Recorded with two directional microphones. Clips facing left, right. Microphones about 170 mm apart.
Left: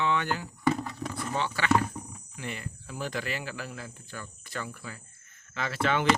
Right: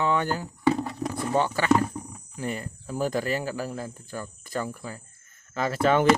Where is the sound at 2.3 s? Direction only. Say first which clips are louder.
Right 7 dB; 40° right (ahead or behind).